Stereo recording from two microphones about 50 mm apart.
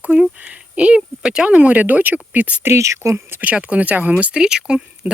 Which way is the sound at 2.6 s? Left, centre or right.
Right.